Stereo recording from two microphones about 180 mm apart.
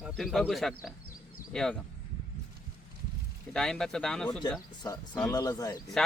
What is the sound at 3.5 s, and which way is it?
Speech, 5° left (ahead or behind).